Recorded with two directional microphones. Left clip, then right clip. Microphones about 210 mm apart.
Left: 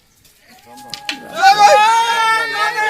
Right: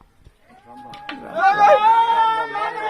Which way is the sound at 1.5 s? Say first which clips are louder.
Left 4 dB; 55° left (ahead or behind).